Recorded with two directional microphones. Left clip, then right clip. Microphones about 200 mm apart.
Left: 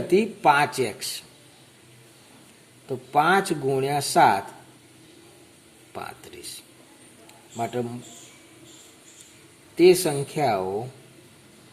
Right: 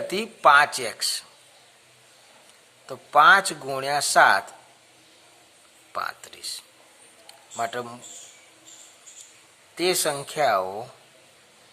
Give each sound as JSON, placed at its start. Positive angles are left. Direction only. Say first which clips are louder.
{"t": 0.1, "sound": "speech", "louder": "right 2 dB", "side_deg": -30}
{"t": 2.8, "sound": "speech", "louder": "right 5 dB", "side_deg": -25}
{"t": 5.9, "sound": "speech", "louder": "right 6 dB", "side_deg": -25}
{"t": 9.7, "sound": "speech", "louder": "left 6 dB", "side_deg": -25}